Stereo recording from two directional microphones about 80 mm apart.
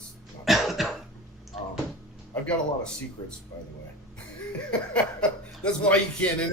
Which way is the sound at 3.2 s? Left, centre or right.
Left.